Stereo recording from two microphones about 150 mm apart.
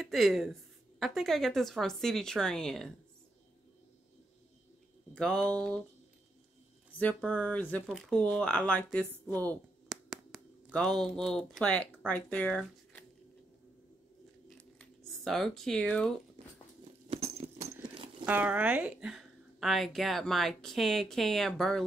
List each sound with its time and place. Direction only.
0.0 s a woman's voice: centre (ahead or behind)
5.1 s a woman's voice: 5° left (ahead or behind)
7.2 s speech: 10° left (ahead or behind)
9.8 s a sound: 5° right (ahead or behind)
10.7 s a woman's voice: 5° left (ahead or behind)
14.8 s speech: centre (ahead or behind)
16.4 s a sound: 40° right (ahead or behind)
18.2 s a woman's voice: 10° right (ahead or behind)